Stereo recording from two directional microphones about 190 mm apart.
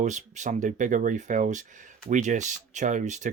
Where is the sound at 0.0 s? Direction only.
40° right (ahead or behind).